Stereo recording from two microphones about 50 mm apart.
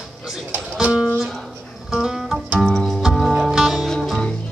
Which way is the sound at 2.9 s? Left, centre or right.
Centre.